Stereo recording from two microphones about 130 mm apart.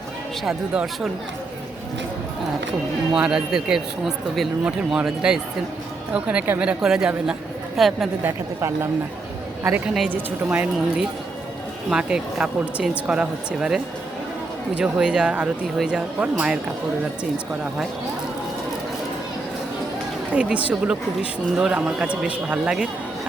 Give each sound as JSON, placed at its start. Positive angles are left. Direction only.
{"t": 0.4, "sound": "speech", "side_deg": -5}
{"t": 3.1, "sound": "speech", "side_deg": -5}
{"t": 8.2, "sound": "a woman's voice", "side_deg": -20}
{"t": 9.8, "sound": "speech", "side_deg": 0}
{"t": 10.1, "sound": "speech", "side_deg": -15}
{"t": 20.3, "sound": "speech", "side_deg": -10}